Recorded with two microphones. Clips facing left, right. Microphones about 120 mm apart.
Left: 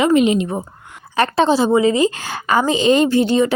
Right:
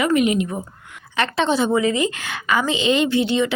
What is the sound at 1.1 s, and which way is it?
A woman's voice, 40° left (ahead or behind).